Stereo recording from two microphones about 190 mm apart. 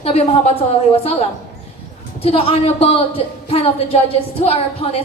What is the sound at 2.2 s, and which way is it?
A woman's voice, 30° left (ahead or behind).